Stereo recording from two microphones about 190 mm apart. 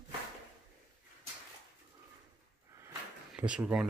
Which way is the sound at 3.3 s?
5° right (ahead or behind).